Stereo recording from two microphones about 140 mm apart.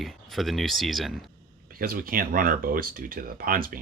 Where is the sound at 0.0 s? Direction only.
Centre (ahead or behind).